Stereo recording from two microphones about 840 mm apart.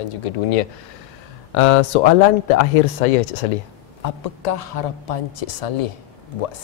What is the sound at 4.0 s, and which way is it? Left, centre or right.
A woman's voice, left.